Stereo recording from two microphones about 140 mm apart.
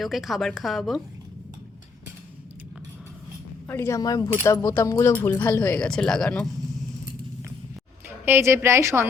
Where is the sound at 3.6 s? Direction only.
15° left (ahead or behind).